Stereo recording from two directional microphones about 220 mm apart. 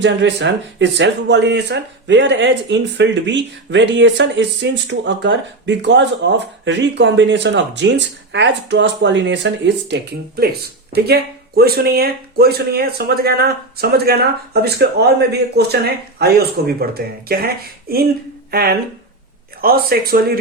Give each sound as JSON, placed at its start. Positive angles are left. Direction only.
{"t": 0.0, "sound": "speech", "side_deg": -55}